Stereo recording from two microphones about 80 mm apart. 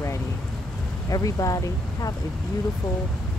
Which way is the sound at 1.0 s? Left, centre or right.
Left.